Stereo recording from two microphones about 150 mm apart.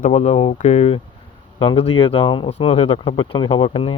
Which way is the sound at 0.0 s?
45° left (ahead or behind).